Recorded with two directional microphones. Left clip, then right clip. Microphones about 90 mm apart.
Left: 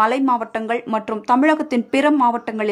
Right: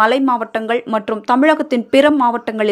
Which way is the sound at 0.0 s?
30° right (ahead or behind).